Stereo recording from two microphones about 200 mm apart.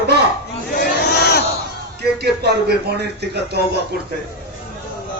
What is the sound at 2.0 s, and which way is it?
A man's voice, 55° right (ahead or behind).